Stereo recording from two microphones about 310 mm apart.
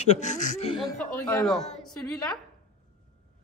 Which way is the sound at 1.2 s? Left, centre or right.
Centre.